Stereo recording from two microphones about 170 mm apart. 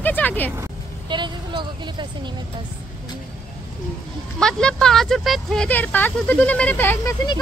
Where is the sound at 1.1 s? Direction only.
30° right (ahead or behind).